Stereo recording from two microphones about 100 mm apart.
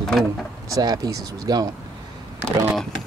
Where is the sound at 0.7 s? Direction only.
40° right (ahead or behind).